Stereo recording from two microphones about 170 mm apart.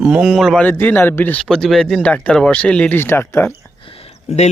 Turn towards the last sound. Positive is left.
turn(degrees=40)  # may be behind; listen again after turning